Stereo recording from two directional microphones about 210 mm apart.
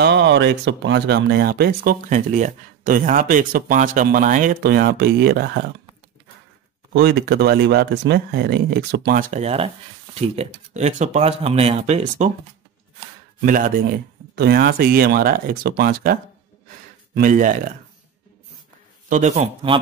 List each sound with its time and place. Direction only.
0.0 s speech: 55° right (ahead or behind)
6.9 s speech: 55° right (ahead or behind); by 12.3 s 35° right (ahead or behind)
13.5 s speech: 40° right (ahead or behind)
19.0 s speech: 35° right (ahead or behind)